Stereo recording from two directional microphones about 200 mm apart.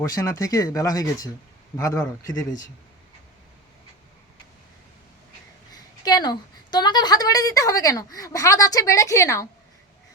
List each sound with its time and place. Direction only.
0.0 s a woman's voice: 15° left (ahead or behind)
6.1 s a woman's voice: 20° left (ahead or behind)